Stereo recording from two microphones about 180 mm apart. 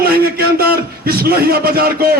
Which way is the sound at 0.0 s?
55° right (ahead or behind).